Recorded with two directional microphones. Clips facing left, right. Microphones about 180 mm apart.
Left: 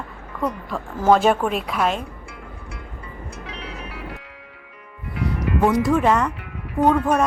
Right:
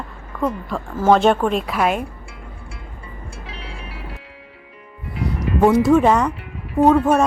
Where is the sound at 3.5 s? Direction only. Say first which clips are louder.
Left 1 dB; 30° right (ahead or behind).